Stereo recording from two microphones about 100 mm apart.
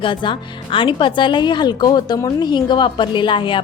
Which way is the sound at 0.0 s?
55° left (ahead or behind).